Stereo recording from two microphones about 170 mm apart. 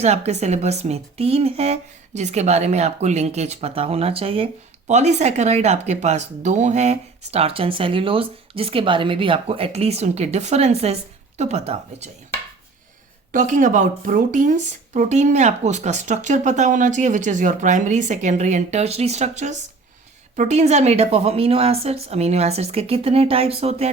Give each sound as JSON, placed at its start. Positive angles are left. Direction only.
{"t": 0.0, "sound": "speech", "side_deg": -40}
{"t": 13.3, "sound": "speech", "side_deg": -50}